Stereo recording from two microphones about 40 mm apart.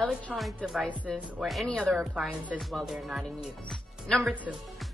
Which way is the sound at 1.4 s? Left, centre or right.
Centre.